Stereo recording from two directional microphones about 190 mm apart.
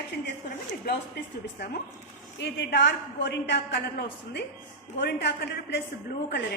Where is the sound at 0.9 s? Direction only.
55° left (ahead or behind).